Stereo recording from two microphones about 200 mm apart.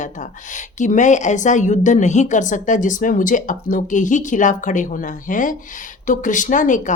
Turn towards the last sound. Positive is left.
turn(degrees=40)  # may be behind; listen again after turning